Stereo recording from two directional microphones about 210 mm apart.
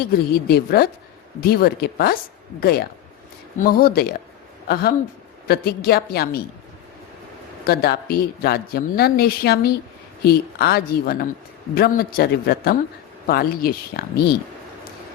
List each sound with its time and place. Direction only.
0.3 s speech: 45° left (ahead or behind)
7.7 s speech: 45° left (ahead or behind)